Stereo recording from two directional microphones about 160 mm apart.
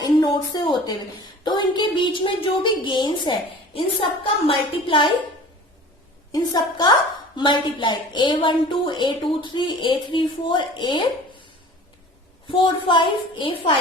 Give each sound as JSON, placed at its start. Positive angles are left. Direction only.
{"t": 0.0, "sound": "a woman's voice", "side_deg": 25}
{"t": 6.3, "sound": "a woman's voice", "side_deg": 25}
{"t": 12.5, "sound": "a woman's voice", "side_deg": 30}